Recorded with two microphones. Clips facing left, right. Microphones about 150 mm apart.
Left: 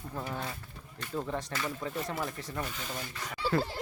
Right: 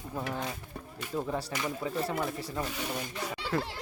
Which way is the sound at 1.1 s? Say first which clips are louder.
Right 2 dB; 10° right (ahead or behind).